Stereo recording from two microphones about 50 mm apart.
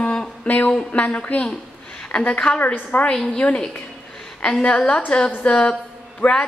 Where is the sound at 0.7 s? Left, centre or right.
Left.